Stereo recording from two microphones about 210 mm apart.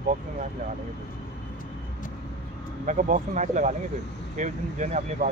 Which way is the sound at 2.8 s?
35° right (ahead or behind).